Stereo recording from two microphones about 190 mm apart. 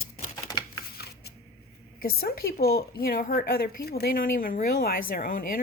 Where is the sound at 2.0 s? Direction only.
55° left (ahead or behind).